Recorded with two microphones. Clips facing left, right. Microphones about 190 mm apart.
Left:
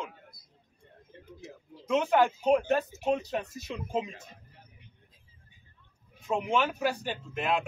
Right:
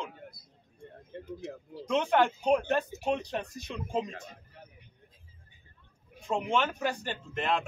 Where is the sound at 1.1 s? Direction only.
65° right (ahead or behind).